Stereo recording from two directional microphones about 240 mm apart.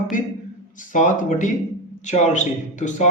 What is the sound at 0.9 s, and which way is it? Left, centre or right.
A man's voice, left.